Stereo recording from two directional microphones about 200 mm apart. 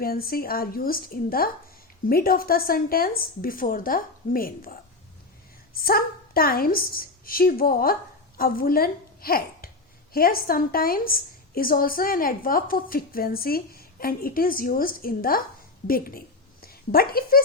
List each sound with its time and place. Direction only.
0.0 s a woman's voice: 50° left (ahead or behind)